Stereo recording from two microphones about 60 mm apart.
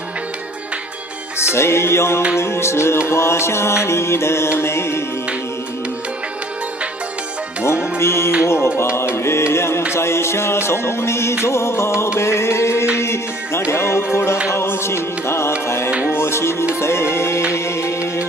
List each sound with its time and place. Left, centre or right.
1.5 s music: left
7.9 s music: left
15.9 s music: centre
16.1 s music: left